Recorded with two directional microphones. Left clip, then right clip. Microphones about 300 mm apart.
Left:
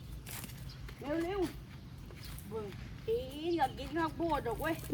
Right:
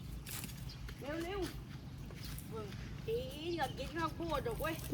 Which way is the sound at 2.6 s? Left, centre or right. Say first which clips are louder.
Left 5 dB; left.